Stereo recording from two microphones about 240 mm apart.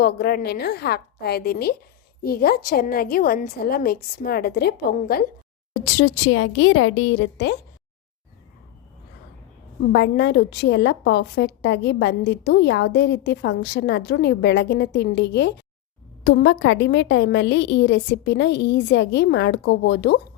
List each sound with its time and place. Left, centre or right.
0.0 s a woman's voice: left
5.8 s a woman's voice: left
9.8 s a woman's voice: left